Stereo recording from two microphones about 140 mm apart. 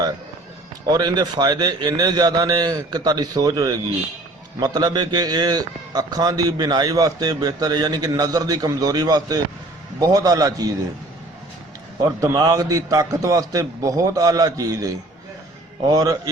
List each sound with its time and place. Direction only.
0.9 s a man's voice: 30° right (ahead or behind)
12.0 s a man's voice: 25° right (ahead or behind)